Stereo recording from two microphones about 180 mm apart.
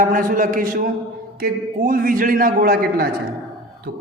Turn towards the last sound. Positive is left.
turn(degrees=-55)  # may be behind; listen again after turning